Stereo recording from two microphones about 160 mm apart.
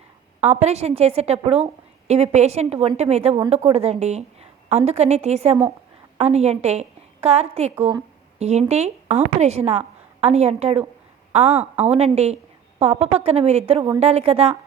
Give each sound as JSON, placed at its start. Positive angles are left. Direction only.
{"t": 0.4, "sound": "a woman's voice", "side_deg": -40}